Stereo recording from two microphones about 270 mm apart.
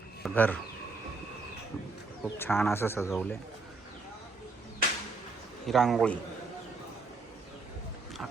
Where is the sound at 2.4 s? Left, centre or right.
Centre.